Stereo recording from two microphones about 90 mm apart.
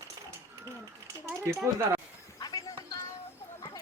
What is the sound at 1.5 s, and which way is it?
Speech, 30° right (ahead or behind).